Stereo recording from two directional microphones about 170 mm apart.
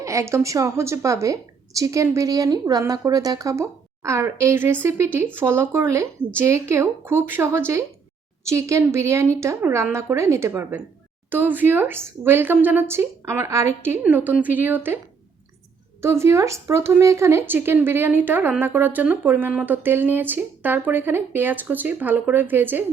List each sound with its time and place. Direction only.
0.0 s speech: 15° right (ahead or behind)
16.0 s speech: 15° right (ahead or behind)